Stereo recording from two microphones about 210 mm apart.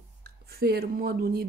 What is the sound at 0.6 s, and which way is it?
Speech, 45° right (ahead or behind).